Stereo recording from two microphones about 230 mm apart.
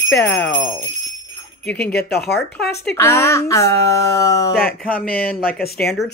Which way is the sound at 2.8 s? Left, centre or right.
Centre.